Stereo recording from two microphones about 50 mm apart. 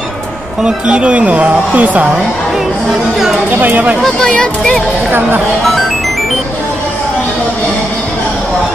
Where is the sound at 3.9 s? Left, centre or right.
Centre.